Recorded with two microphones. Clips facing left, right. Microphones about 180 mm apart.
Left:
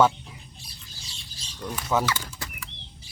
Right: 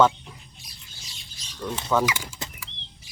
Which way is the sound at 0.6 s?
30° left (ahead or behind).